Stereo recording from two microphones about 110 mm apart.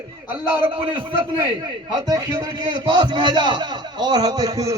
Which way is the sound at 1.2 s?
45° right (ahead or behind).